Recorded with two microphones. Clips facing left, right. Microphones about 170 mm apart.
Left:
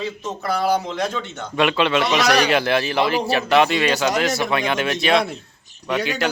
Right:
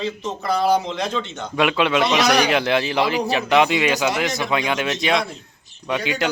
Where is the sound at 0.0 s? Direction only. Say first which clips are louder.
Right 1 dB; 5° left (ahead or behind).